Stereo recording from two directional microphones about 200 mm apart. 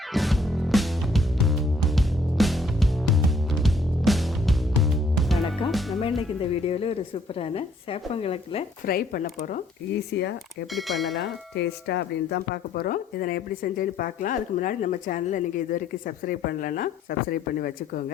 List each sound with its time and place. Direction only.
0.1 s music: centre (ahead or behind)
6.0 s music: 25° left (ahead or behind)
6.7 s a woman's voice: 30° left (ahead or behind)
8.9 s speech: 50° left (ahead or behind)
10.1 s speech: 55° left (ahead or behind)
10.8 s speech: centre (ahead or behind)
11.5 s speech: 60° left (ahead or behind)